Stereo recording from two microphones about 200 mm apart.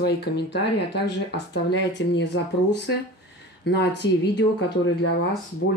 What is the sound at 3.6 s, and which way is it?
Speech, 60° left (ahead or behind).